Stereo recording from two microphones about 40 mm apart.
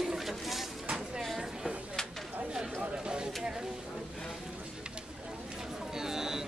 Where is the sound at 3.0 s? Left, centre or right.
Right.